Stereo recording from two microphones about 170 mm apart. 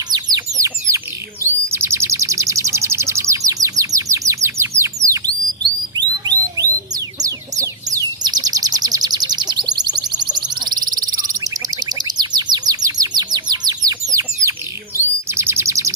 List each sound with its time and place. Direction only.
0.1 s bird: 25° right (ahead or behind)
6.6 s chicken: 20° right (ahead or behind)
14.9 s bird: 15° right (ahead or behind)